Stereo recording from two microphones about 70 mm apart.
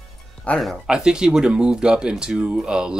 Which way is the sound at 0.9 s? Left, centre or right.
Centre.